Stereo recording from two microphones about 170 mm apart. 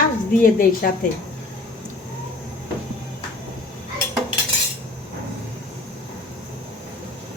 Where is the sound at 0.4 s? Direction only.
55° left (ahead or behind).